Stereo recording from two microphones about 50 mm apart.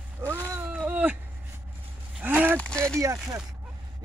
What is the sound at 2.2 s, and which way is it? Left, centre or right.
Speech, right.